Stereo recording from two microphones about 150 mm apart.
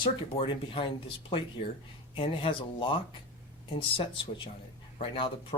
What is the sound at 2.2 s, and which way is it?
Speech, 35° left (ahead or behind).